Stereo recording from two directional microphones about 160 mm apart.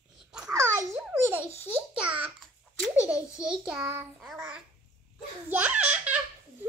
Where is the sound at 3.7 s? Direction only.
10° right (ahead or behind).